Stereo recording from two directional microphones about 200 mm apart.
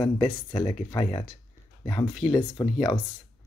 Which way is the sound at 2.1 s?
Centre (ahead or behind).